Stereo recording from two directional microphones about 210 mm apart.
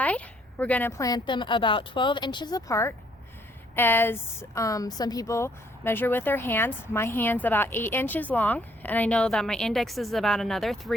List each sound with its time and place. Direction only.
0.6 s a woman's voice: 10° left (ahead or behind)